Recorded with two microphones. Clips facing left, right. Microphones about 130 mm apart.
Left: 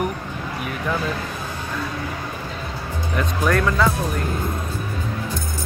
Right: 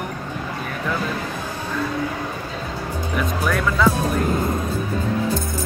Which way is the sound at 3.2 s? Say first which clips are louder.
Left 2 dB; 5° right (ahead or behind).